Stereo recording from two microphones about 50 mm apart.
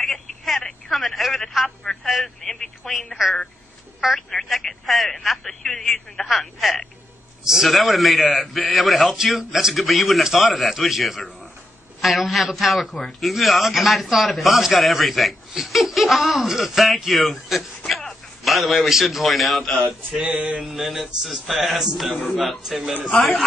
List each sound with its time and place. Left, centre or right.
0.0 s telephone: centre
0.8 s a man's voice: centre
2.2 s a man's voice: centre
20.2 s a sound: right
20.6 s a man's voice: centre
22.1 s speech: left
22.6 s a man's voice: centre